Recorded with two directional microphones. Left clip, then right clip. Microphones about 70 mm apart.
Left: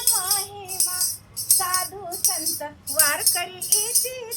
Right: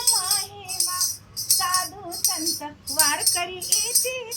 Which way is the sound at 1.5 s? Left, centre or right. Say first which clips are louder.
Right 1 dB; left.